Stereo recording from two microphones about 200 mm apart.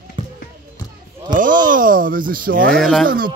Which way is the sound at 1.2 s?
40° right (ahead or behind).